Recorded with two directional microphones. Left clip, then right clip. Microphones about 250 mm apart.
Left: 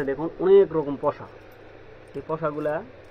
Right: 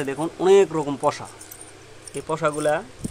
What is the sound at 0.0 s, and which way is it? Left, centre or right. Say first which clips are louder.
Speech: right 2 dB; right.